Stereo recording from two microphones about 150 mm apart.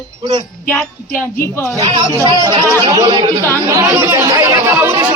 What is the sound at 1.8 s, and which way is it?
Speech, 30° right (ahead or behind).